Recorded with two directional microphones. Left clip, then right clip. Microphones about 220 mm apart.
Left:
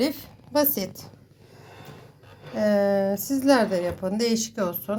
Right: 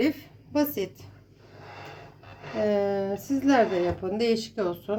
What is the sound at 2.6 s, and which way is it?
A woman's voice, 25° left (ahead or behind).